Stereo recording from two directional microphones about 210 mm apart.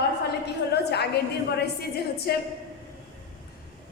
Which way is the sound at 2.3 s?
50° left (ahead or behind).